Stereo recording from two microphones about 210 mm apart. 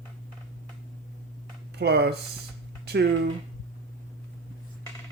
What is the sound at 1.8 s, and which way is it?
Speech, 50° right (ahead or behind).